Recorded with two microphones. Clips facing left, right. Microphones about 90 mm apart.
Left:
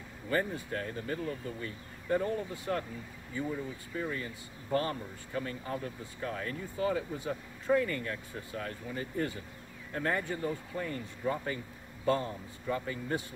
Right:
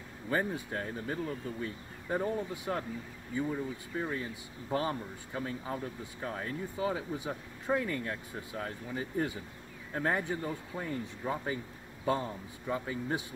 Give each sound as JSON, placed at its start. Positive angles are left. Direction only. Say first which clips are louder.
{"t": 0.3, "sound": "speech", "louder": "even", "side_deg": -10}